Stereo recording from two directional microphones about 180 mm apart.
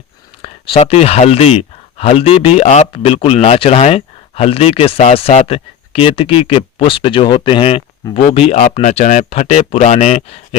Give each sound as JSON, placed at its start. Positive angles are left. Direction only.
{"t": 0.4, "sound": "speech", "side_deg": 30}